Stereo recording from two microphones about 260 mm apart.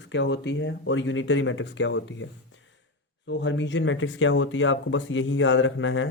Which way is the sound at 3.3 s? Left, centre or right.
Left.